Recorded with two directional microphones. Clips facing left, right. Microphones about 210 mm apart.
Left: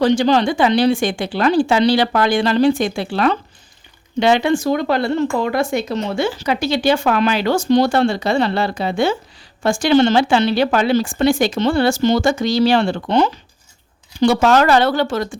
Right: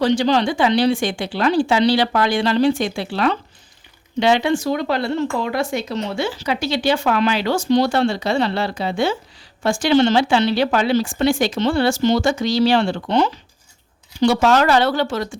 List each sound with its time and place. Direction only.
0.0 s speech: 50° left (ahead or behind)